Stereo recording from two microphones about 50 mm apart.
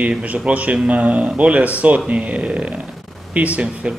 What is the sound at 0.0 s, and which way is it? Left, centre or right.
Speech, right.